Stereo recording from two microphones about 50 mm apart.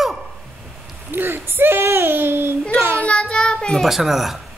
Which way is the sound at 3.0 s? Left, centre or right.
Left.